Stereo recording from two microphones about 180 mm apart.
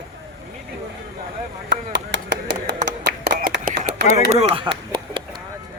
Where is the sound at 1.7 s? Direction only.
85° right.